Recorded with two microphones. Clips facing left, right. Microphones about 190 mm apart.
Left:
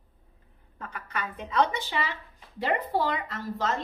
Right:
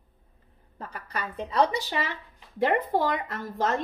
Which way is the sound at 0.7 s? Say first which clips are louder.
Right 1 dB; 35° right (ahead or behind).